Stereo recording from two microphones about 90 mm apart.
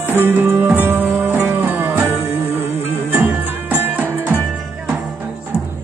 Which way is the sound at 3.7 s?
20° right (ahead or behind).